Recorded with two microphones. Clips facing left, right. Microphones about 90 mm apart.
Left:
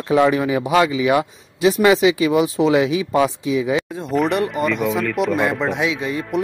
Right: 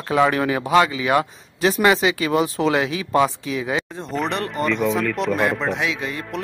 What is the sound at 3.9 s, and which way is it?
Speech, 5° left (ahead or behind).